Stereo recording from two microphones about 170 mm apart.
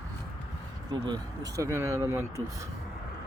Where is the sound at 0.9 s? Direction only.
25° right (ahead or behind).